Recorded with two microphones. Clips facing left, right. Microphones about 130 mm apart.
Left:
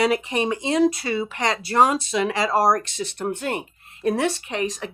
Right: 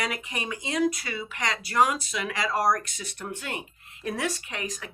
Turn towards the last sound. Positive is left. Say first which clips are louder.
# left 9 dB
turn(degrees=25)  # may be behind; listen again after turning